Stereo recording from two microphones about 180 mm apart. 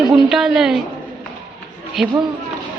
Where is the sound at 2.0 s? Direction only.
Centre (ahead or behind).